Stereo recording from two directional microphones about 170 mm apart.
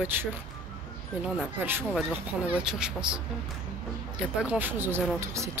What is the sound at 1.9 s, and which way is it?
Speech, 5° right (ahead or behind).